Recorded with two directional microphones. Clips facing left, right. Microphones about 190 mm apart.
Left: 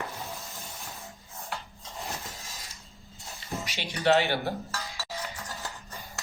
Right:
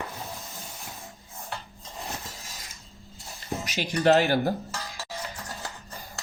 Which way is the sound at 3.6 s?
45° right (ahead or behind).